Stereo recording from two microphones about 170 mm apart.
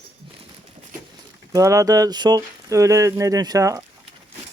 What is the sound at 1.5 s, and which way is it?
Speech, 20° right (ahead or behind).